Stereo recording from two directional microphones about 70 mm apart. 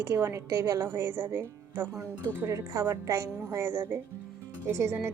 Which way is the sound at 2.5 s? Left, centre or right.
Right.